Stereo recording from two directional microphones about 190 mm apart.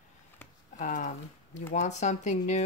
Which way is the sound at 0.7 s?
40° left (ahead or behind).